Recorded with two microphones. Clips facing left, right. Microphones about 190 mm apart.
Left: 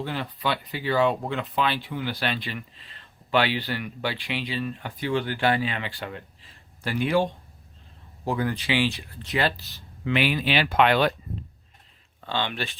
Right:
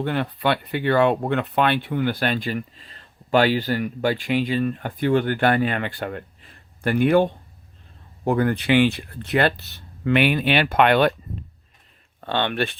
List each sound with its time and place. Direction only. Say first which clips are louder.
0.0 s speech: right 6 dB; 60° right (ahead or behind)
12.2 s speech: right 6 dB; 60° right (ahead or behind)